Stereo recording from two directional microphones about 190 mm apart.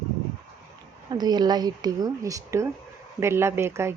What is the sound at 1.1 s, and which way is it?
A woman's voice, 20° right (ahead or behind).